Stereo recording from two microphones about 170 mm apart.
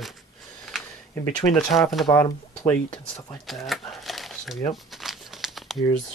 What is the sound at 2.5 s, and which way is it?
Speech, 10° left (ahead or behind).